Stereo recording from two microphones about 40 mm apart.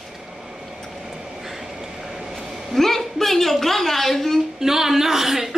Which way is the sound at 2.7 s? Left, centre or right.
Centre.